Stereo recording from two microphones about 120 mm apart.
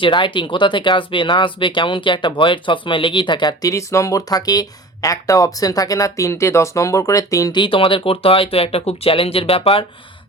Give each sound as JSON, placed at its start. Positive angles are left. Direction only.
{"t": 0.0, "sound": "speech", "side_deg": 40}
{"t": 7.5, "sound": "speech", "side_deg": 45}